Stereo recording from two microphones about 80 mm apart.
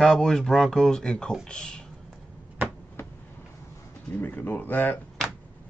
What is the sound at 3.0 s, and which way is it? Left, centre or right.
Vehicle, left.